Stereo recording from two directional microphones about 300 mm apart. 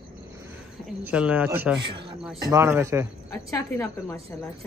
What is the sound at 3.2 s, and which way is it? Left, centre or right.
Speech, centre.